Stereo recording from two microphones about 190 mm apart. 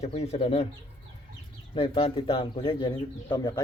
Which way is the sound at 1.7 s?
30° left (ahead or behind).